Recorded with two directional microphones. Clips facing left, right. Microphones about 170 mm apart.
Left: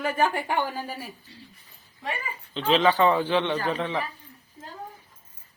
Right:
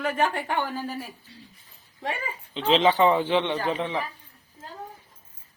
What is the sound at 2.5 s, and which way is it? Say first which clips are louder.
Speech: right 1 dB; 20° right (ahead or behind).